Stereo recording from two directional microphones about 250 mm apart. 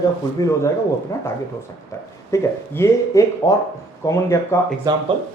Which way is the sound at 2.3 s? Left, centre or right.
Centre.